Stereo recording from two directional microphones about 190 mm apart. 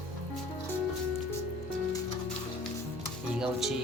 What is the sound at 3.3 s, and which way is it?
Speech, 5° right (ahead or behind).